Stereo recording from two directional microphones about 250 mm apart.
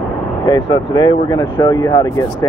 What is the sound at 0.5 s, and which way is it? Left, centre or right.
Speech, centre.